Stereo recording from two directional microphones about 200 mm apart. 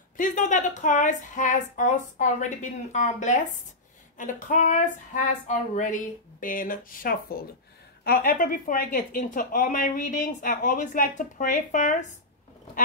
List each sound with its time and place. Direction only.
0.2 s speech: 40° left (ahead or behind)